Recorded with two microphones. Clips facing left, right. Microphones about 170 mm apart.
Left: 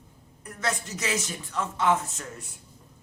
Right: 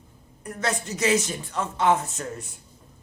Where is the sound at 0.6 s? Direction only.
35° right (ahead or behind).